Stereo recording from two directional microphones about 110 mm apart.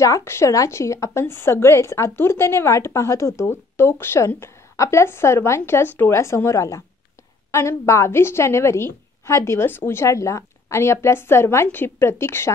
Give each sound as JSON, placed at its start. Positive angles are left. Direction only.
{"t": 0.0, "sound": "a woman's voice", "side_deg": 25}